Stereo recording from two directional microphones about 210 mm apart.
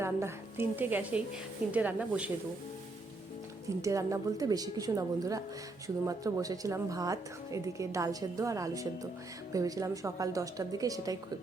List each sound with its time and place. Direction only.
0.0 s a woman's voice: 10° right (ahead or behind)
3.8 s a woman's voice: 15° right (ahead or behind)